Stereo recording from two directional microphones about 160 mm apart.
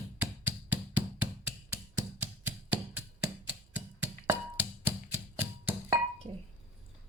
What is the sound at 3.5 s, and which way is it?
Music, 10° right (ahead or behind).